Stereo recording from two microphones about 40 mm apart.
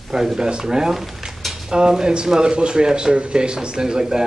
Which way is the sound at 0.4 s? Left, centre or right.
Centre.